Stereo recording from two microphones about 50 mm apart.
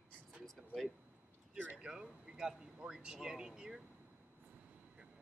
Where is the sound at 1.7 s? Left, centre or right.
Centre.